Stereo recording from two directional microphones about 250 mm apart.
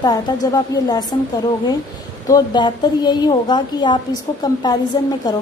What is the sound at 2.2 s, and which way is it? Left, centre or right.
A woman's voice, centre.